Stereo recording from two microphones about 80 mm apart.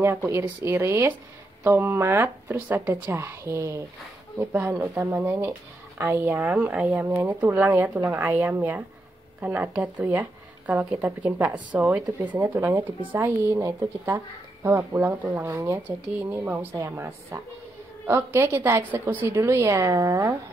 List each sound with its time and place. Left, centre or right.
0.0 s a woman's voice: right
2.9 s a woman's voice: right
12.5 s a woman's voice: right
13.0 s a woman's voice: right
15.5 s a woman's voice: right
16.1 s a woman's voice: right